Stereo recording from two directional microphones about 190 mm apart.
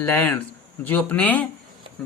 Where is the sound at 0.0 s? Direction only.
10° left (ahead or behind).